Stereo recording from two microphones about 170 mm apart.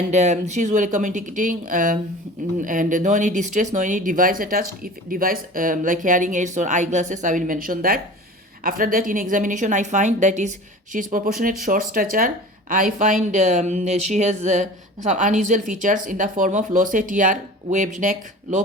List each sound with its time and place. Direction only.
0.1 s speech: 45° right (ahead or behind)